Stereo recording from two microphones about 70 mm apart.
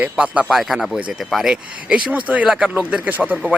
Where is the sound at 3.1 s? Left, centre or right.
Right.